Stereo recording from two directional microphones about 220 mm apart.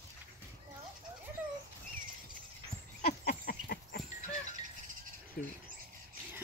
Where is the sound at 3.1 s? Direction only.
40° left (ahead or behind).